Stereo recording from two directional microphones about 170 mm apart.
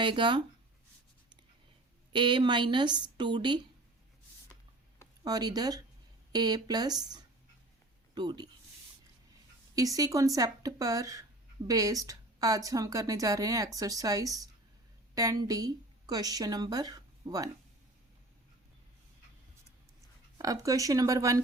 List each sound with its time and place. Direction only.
0.0 s a woman's voice: 30° right (ahead or behind)
2.1 s a woman's voice: 25° right (ahead or behind)
5.2 s a woman's voice: 25° right (ahead or behind)
9.7 s a woman's voice: 20° right (ahead or behind)
20.4 s a woman's voice: 20° right (ahead or behind)